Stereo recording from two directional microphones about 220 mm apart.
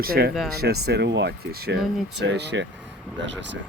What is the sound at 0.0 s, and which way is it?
Speech, 45° right (ahead or behind).